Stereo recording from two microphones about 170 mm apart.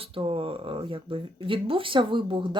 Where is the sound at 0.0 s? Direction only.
35° right (ahead or behind).